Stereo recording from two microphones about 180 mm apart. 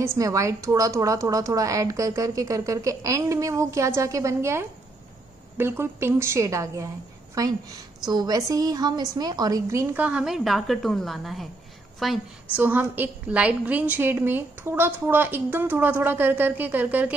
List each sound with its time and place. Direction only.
0.0 s a woman's voice: 15° right (ahead or behind)
8.1 s a woman's voice: 20° right (ahead or behind)